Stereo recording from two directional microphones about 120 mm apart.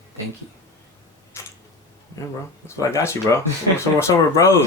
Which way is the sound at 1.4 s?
25° left (ahead or behind).